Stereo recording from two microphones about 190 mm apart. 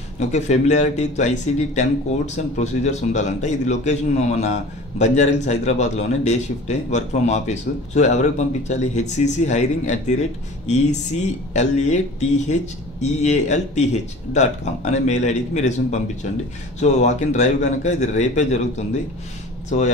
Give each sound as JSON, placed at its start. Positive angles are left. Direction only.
{"t": 0.2, "sound": "a man's voice", "side_deg": 35}
{"t": 11.5, "sound": "a man's voice", "side_deg": 40}